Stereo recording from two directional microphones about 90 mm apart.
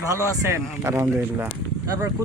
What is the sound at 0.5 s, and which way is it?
Speech, 30° right (ahead or behind).